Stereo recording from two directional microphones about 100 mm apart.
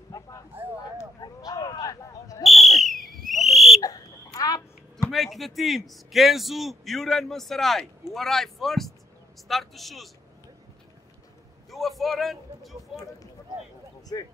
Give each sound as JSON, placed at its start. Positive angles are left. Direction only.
{"t": 0.1, "sound": "a sound", "side_deg": 35}
{"t": 2.4, "sound": "fire alarm", "side_deg": 0}
{"t": 3.8, "sound": "a sound", "side_deg": 40}
{"t": 5.1, "sound": "a man's voice", "side_deg": 0}
{"t": 12.0, "sound": "a man's voice", "side_deg": 0}
{"t": 14.1, "sound": "speech", "side_deg": 40}